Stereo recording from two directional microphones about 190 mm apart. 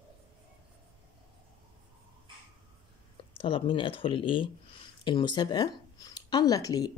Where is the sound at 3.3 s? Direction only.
25° left (ahead or behind).